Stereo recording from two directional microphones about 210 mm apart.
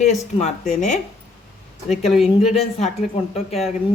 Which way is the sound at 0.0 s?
35° left (ahead or behind).